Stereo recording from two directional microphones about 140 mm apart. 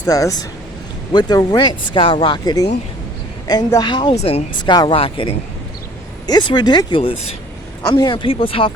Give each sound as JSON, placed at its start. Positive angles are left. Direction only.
{"t": 0.1, "sound": "a woman's voice", "side_deg": 25}
{"t": 4.1, "sound": "speech", "side_deg": 50}
{"t": 4.6, "sound": "speech", "side_deg": 30}